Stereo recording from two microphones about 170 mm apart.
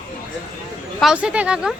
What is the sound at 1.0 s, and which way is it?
Speech, 5° right (ahead or behind).